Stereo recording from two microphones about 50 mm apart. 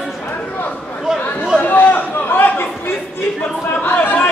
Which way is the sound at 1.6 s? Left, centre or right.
Left.